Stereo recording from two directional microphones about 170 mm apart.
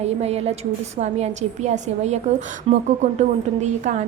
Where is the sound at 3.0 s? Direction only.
45° right (ahead or behind).